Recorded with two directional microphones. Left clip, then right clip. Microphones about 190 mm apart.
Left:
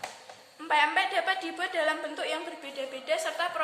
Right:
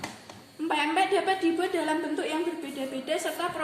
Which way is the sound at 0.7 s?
10° left (ahead or behind).